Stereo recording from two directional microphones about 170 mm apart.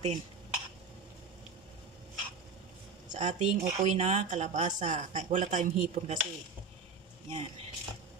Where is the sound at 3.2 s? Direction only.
45° right (ahead or behind).